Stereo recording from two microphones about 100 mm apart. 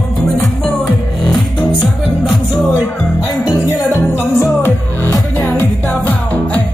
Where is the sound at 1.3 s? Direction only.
10° left (ahead or behind).